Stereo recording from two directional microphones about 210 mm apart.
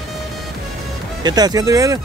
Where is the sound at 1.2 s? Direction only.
20° right (ahead or behind).